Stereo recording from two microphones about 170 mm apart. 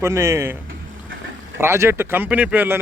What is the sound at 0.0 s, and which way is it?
Speech, 15° right (ahead or behind).